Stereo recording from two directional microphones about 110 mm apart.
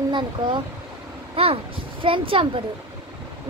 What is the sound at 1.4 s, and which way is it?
A child's voice, 55° right (ahead or behind).